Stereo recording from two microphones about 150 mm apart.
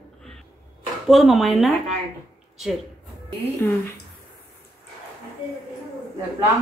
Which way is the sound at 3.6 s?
15° left (ahead or behind).